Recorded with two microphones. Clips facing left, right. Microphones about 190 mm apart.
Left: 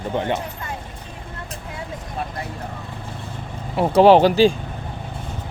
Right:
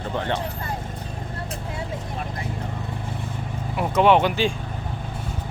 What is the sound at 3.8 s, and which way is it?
Speech, 35° left (ahead or behind).